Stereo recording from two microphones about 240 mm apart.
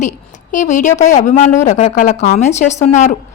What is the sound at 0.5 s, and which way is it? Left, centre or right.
A woman's voice, left.